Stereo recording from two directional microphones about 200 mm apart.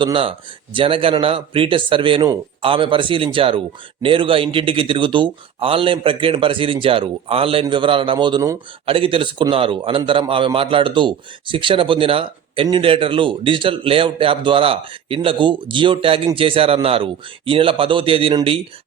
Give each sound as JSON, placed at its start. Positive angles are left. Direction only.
{"t": 0.0, "sound": "a man's voice", "side_deg": -25}